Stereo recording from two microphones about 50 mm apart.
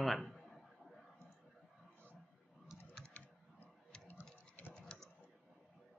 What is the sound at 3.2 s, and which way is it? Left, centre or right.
Typing, left.